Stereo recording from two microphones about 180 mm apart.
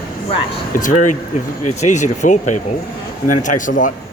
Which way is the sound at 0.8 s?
45° left (ahead or behind).